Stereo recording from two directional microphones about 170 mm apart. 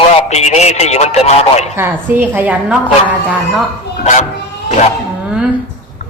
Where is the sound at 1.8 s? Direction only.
10° right (ahead or behind).